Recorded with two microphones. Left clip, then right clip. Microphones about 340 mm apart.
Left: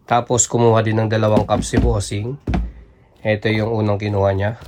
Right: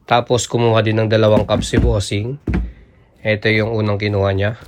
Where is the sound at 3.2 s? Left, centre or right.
Centre.